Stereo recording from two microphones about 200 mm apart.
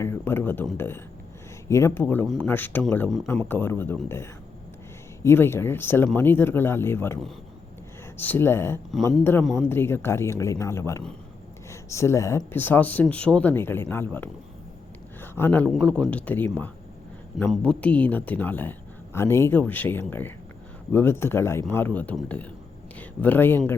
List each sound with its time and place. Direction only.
0.0 s a man's voice: 10° left (ahead or behind)
8.2 s a man's voice: 10° left (ahead or behind)